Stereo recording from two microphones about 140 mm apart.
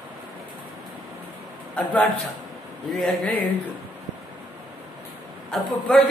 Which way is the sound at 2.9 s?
Centre (ahead or behind).